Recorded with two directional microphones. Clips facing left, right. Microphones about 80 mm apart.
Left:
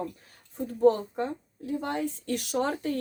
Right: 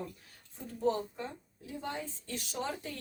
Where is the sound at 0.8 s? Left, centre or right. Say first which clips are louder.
Left 10 dB; left.